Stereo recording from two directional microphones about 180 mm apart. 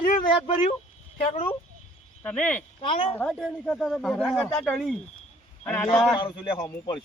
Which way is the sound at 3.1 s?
5° left (ahead or behind).